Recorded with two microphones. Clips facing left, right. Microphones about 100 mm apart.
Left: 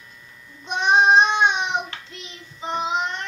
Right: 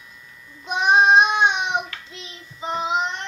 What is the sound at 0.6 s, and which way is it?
Child singing, 5° right (ahead or behind).